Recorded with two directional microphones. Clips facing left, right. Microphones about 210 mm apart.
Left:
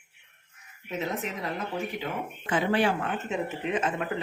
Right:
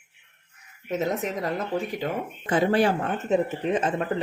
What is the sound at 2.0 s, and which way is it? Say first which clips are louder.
Speech: right 4 dB; 40° right (ahead or behind).